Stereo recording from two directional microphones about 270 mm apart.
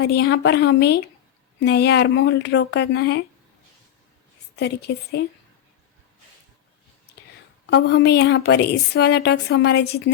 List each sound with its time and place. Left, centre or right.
0.0 s a woman's voice: left
4.5 s a woman's voice: left
7.7 s a woman's voice: left